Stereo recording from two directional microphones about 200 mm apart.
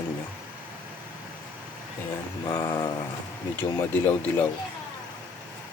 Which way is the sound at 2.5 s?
10° left (ahead or behind).